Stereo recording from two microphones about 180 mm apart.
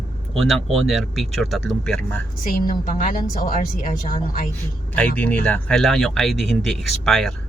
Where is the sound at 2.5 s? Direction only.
50° left (ahead or behind).